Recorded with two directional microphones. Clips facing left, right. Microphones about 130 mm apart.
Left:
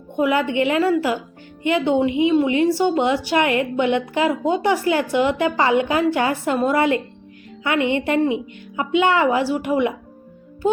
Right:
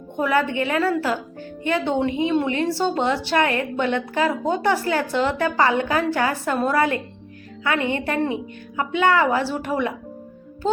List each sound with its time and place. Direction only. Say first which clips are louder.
0.2 s a woman's voice: left 2 dB; 15° left (ahead or behind)